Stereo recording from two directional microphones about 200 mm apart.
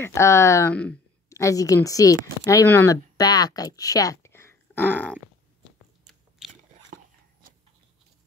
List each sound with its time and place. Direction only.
0.0 s a woman's voice: 15° left (ahead or behind)
6.4 s biting: centre (ahead or behind)